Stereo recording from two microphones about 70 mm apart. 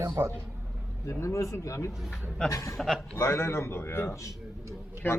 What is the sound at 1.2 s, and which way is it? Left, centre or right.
Speech, left.